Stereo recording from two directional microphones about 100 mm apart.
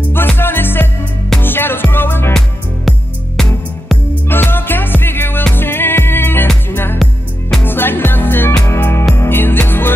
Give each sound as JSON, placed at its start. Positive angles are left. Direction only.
{"t": 0.4, "sound": "music", "side_deg": 20}
{"t": 3.3, "sound": "music", "side_deg": 5}
{"t": 4.3, "sound": "music", "side_deg": 20}